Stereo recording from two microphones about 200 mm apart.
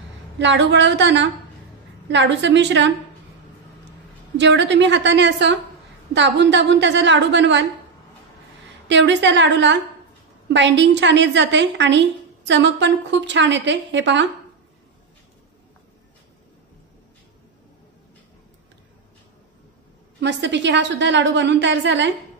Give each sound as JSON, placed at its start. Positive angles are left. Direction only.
{"t": 0.4, "sound": "a woman's voice", "side_deg": -60}
{"t": 4.4, "sound": "a woman's voice", "side_deg": -60}
{"t": 8.8, "sound": "a woman's voice", "side_deg": -65}
{"t": 20.2, "sound": "a woman's voice", "side_deg": -60}